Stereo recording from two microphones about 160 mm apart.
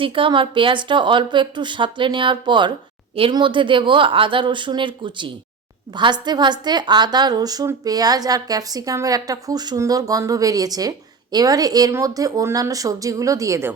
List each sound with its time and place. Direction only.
0.0 s a woman's voice: 35° right (ahead or behind); by 13.7 s 15° right (ahead or behind)